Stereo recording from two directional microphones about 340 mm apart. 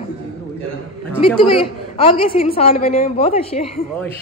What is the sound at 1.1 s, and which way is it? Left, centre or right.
Speech, centre.